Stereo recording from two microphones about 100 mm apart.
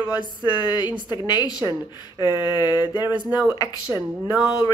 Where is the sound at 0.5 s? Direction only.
45° left (ahead or behind).